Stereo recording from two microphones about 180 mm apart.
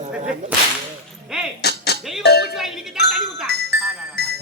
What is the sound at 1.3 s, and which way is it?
Speech, 5° right (ahead or behind).